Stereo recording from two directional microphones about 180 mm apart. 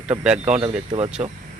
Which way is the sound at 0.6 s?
35° right (ahead or behind).